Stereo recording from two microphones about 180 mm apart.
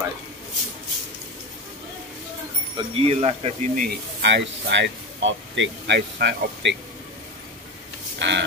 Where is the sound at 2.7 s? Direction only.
35° right (ahead or behind).